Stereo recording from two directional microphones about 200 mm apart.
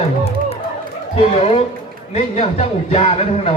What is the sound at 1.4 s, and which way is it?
Speech, 30° left (ahead or behind).